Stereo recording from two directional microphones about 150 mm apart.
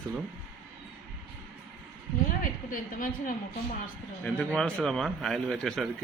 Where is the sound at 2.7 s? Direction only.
60° left (ahead or behind).